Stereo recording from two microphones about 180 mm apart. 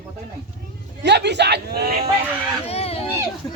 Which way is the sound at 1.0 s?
70° right (ahead or behind).